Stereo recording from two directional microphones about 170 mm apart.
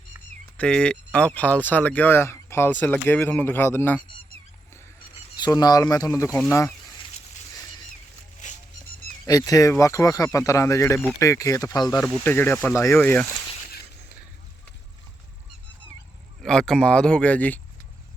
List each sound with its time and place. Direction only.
0.5 s speech: 5° left (ahead or behind)
5.4 s speech: 25° left (ahead or behind)
8.4 s music: 45° left (ahead or behind)
9.2 s speech: 20° left (ahead or behind)
16.4 s speech: centre (ahead or behind)